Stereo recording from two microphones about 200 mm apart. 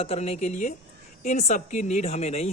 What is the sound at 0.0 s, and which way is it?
A man's voice, 30° left (ahead or behind).